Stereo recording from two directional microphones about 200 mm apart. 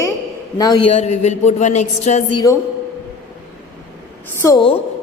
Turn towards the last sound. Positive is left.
turn(degrees=15)  # may be behind; listen again after turning